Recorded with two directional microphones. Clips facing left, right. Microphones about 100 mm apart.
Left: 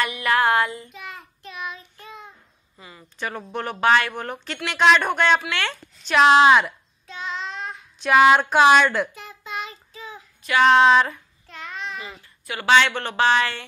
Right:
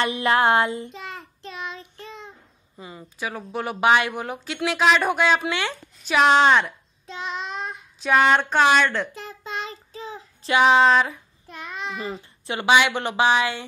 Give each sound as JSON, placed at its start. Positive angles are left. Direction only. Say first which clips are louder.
{"t": 0.0, "sound": "child singing", "louder": "right 1 dB", "side_deg": -25}
{"t": 2.8, "sound": "a woman's voice", "louder": "right 6 dB", "side_deg": -20}
{"t": 3.2, "sound": "a woman's voice", "louder": "even", "side_deg": -5}
{"t": 3.8, "sound": "a woman's voice", "louder": "even", "side_deg": -15}
{"t": 7.1, "sound": "child singing", "louder": "right 1 dB", "side_deg": -20}
{"t": 8.0, "sound": "a woman's voice", "louder": "left 3 dB", "side_deg": 5}
{"t": 9.1, "sound": "child singing", "louder": "right 1 dB", "side_deg": -35}
{"t": 10.6, "sound": "a woman's voice", "louder": "left 2 dB", "side_deg": -5}
{"t": 11.4, "sound": "child singing", "louder": "even", "side_deg": -15}
{"t": 12.0, "sound": "a child's voice", "louder": "right 7 dB", "side_deg": -30}
{"t": 12.6, "sound": "speech", "louder": "left 1 dB", "side_deg": -15}